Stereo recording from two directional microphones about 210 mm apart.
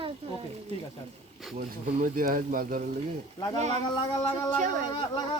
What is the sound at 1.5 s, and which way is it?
Speech, 45° right (ahead or behind).